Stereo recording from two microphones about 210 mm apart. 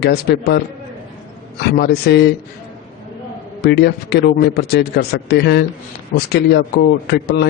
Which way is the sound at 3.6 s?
50° left (ahead or behind).